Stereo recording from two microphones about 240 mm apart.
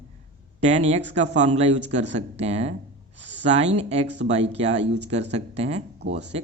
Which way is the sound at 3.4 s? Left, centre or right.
Right.